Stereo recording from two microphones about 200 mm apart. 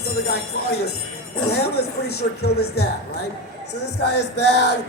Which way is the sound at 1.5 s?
55° left (ahead or behind).